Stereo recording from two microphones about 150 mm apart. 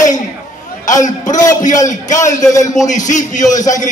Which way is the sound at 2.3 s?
25° left (ahead or behind).